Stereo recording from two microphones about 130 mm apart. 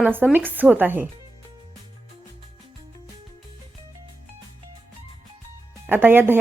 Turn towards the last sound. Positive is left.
turn(degrees=-15)  # may be behind; listen again after turning